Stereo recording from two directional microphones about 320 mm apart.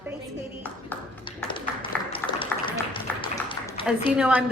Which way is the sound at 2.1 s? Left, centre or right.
Centre.